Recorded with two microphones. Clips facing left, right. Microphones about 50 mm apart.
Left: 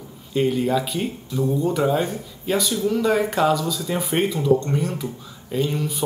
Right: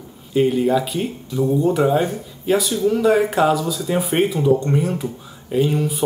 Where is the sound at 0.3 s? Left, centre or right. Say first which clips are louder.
Right 4 dB; centre.